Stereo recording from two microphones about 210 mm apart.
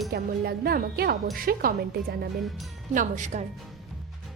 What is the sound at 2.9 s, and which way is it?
Speech, 35° right (ahead or behind).